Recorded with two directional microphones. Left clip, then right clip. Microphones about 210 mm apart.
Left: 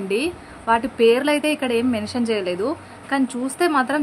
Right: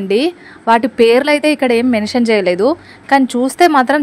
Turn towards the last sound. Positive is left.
turn(degrees=-35)  # may be behind; listen again after turning